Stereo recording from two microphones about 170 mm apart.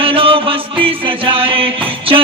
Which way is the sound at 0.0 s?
30° right (ahead or behind).